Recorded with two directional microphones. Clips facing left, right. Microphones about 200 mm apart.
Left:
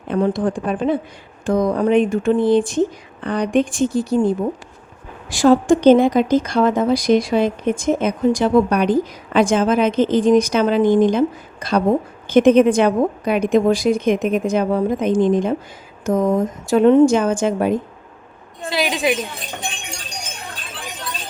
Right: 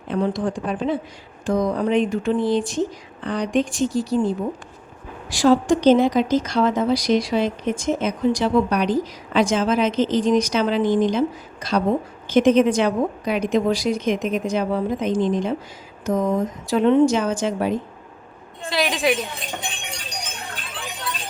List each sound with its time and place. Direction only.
0.1 s speech: 55° left (ahead or behind)
18.7 s a woman's voice: centre (ahead or behind)